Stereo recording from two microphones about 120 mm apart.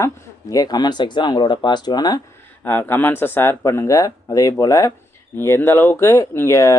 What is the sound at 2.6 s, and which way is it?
Speech, 15° left (ahead or behind).